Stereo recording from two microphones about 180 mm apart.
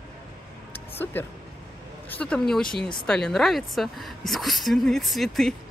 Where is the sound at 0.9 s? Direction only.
10° left (ahead or behind).